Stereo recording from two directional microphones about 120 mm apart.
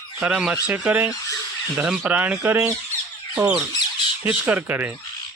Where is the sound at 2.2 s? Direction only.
15° right (ahead or behind).